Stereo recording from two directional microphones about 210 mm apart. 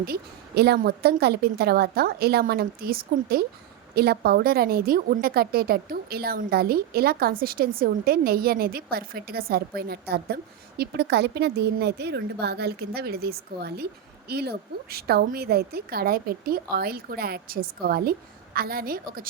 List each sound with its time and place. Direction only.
0.0 s a woman's voice: 50° right (ahead or behind)